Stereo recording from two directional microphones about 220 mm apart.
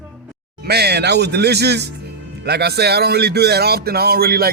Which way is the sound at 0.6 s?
45° right (ahead or behind).